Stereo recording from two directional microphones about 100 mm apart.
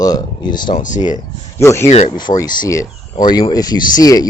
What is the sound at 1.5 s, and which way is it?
Speech, 25° left (ahead or behind).